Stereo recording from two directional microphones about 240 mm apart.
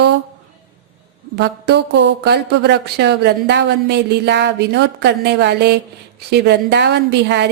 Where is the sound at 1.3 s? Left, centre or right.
Right.